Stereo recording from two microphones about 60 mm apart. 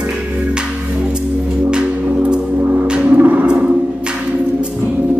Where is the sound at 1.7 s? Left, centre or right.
Centre.